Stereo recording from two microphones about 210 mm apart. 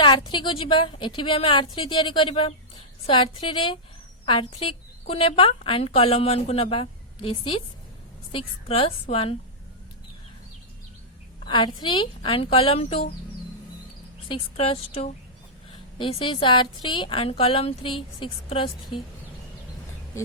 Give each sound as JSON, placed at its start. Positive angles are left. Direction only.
{"t": 0.0, "sound": "a woman's voice", "side_deg": 25}
{"t": 11.4, "sound": "a woman's voice", "side_deg": 20}
{"t": 14.3, "sound": "a woman's voice", "side_deg": 25}